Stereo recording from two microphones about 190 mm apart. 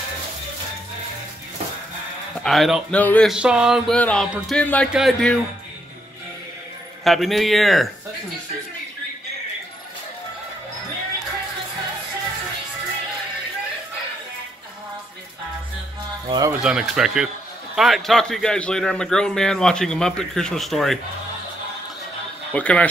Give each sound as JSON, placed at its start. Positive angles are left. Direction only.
{"t": 2.4, "sound": "a man's voice", "side_deg": 0}
{"t": 7.1, "sound": "a man's voice", "side_deg": 0}
{"t": 16.3, "sound": "speech", "side_deg": -20}
{"t": 16.6, "sound": "a man's voice", "side_deg": -5}
{"t": 22.5, "sound": "a man's voice", "side_deg": 5}